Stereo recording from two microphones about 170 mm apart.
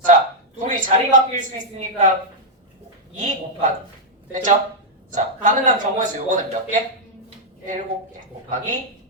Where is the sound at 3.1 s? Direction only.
50° right (ahead or behind).